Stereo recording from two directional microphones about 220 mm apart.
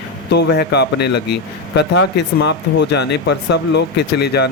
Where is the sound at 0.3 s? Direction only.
50° left (ahead or behind).